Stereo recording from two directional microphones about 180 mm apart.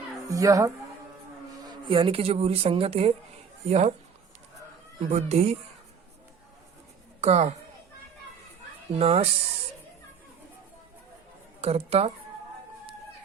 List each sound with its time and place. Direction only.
0.3 s a woman's voice: 20° right (ahead or behind)
1.7 s speech: 30° right (ahead or behind)
4.9 s speech: 40° right (ahead or behind)
7.2 s speech: 40° right (ahead or behind)
9.0 s speech: 35° right (ahead or behind)
11.6 s speech: 35° right (ahead or behind)